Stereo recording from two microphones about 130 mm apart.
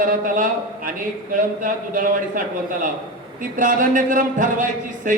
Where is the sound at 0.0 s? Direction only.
90° right.